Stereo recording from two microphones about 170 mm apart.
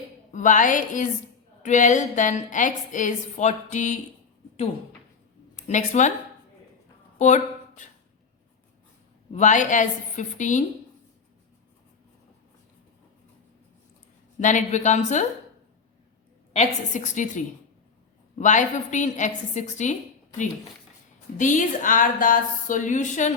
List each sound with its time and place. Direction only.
0.3 s a woman's voice: 45° left (ahead or behind)
5.6 s a woman's voice: 45° left (ahead or behind)
7.2 s speech: 45° left (ahead or behind)
9.3 s a woman's voice: 45° left (ahead or behind)
14.3 s a woman's voice: 45° left (ahead or behind)
16.5 s a woman's voice: 45° left (ahead or behind)
21.3 s a woman's voice: 45° left (ahead or behind)